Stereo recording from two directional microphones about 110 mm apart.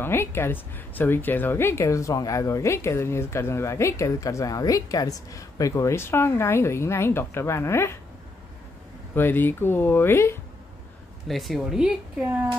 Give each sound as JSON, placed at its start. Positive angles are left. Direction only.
{"t": 0.0, "sound": "a woman's voice", "side_deg": 20}
{"t": 9.1, "sound": "a woman's voice", "side_deg": 20}
{"t": 11.2, "sound": "a woman's voice", "side_deg": 0}